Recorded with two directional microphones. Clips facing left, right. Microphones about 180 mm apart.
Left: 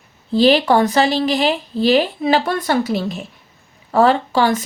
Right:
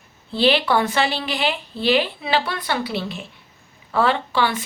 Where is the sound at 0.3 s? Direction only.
40° left (ahead or behind).